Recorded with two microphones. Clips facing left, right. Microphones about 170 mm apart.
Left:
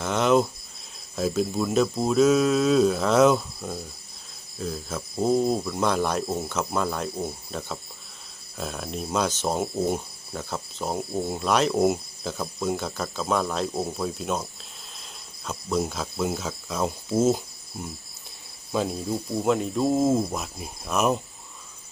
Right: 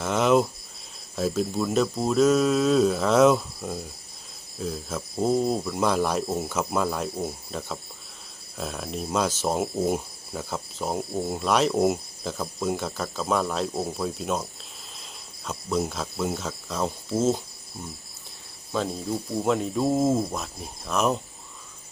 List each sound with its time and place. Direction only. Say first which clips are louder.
0.0 s cricket: even; centre (ahead or behind)
1.1 s speech: left 1 dB; centre (ahead or behind)
15.4 s speech: even; centre (ahead or behind)
18.7 s speech: left 1 dB; 5° left (ahead or behind)